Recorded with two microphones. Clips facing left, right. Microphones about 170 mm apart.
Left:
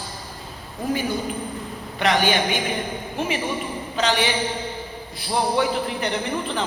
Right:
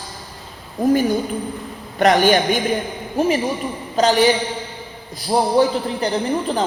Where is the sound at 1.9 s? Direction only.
45° right (ahead or behind).